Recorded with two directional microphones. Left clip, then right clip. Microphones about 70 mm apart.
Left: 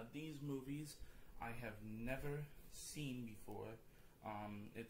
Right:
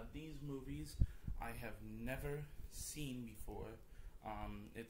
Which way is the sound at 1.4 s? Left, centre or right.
Right.